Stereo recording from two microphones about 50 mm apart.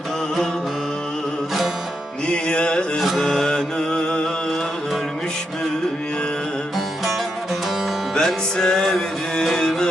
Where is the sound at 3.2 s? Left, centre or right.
Centre.